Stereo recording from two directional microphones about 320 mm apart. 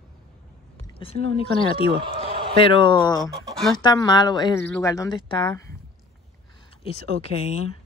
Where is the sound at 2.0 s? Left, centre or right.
Centre.